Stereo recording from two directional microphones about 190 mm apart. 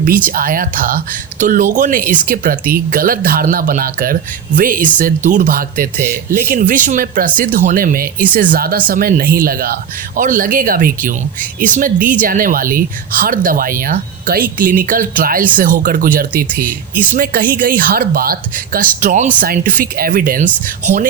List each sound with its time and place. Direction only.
0.0 s speech: 45° right (ahead or behind)